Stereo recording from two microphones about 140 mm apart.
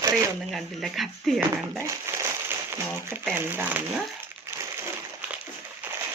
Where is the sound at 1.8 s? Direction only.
20° right (ahead or behind).